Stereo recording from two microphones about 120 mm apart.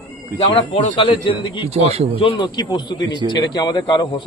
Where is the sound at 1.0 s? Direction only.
45° left (ahead or behind).